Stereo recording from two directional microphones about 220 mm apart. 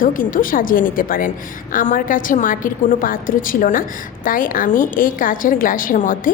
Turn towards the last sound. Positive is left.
turn(degrees=40)  # may be behind; listen again after turning